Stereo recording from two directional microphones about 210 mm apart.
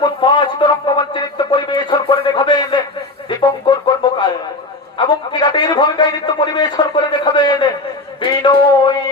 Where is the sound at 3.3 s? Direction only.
20° left (ahead or behind).